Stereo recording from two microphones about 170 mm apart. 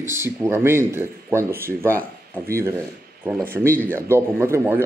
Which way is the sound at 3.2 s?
15° right (ahead or behind).